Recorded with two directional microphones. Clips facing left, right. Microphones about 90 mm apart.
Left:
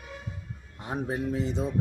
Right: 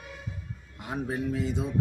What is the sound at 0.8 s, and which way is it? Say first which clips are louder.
Speech: left 1 dB; 25° left (ahead or behind).